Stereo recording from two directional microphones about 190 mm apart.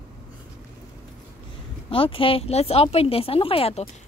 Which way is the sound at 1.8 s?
30° left (ahead or behind).